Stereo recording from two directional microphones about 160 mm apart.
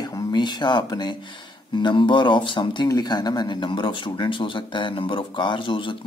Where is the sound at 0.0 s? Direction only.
25° left (ahead or behind).